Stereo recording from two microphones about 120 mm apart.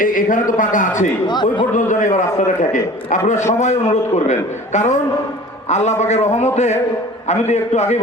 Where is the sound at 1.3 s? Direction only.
40° left (ahead or behind).